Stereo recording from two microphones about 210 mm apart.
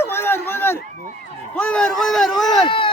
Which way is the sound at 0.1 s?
10° left (ahead or behind).